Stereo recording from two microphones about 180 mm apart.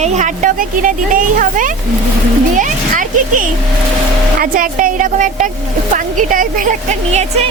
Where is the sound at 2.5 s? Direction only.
45° right (ahead or behind).